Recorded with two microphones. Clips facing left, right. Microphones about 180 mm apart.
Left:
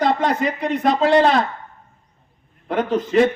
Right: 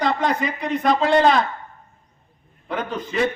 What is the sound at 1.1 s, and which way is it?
Speech, centre (ahead or behind).